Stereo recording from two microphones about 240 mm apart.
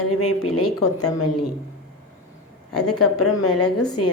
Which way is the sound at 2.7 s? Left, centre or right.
Left.